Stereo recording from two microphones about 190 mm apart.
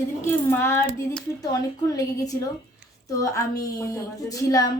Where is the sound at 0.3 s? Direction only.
15° left (ahead or behind).